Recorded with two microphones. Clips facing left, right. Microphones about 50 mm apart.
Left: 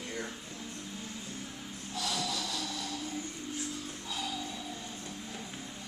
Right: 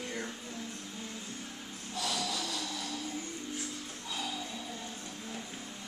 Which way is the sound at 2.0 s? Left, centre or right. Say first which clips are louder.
Even; centre.